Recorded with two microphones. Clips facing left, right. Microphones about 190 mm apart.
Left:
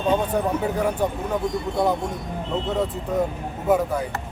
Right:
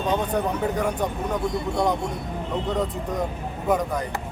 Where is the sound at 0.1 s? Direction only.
5° left (ahead or behind).